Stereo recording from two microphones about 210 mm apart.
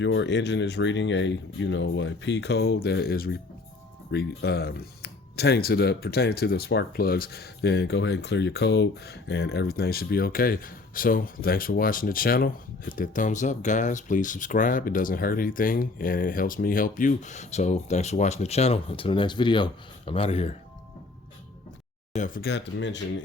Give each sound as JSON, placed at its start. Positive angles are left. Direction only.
{"t": 0.0, "sound": "speech", "side_deg": 60}
{"t": 22.1, "sound": "speech", "side_deg": 40}